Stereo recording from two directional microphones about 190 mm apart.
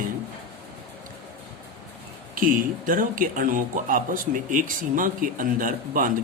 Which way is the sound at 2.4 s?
45° right (ahead or behind).